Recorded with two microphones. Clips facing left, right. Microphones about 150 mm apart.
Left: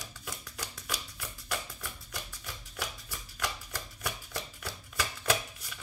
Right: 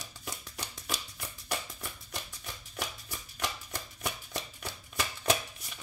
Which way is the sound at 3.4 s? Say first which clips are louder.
Even; 25° right (ahead or behind).